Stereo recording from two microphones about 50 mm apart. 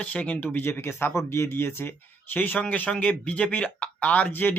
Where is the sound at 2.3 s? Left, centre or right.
Left.